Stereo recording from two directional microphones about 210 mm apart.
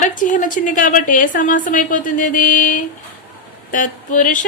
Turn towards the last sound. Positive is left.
turn(degrees=40)  # may be behind; listen again after turning